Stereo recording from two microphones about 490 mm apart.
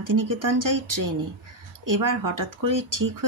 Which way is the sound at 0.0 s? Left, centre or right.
Right.